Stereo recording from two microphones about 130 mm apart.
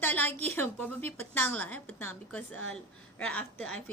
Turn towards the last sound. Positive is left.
turn(degrees=10)  # may be behind; listen again after turning